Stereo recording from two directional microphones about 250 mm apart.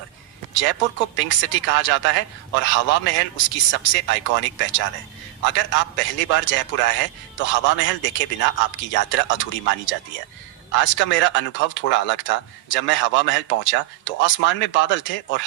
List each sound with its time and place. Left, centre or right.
0.5 s a man's voice: left